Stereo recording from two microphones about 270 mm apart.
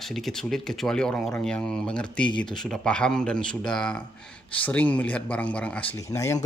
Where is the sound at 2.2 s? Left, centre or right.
Centre.